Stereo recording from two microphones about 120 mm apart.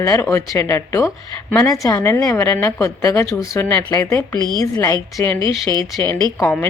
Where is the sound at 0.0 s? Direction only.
25° left (ahead or behind).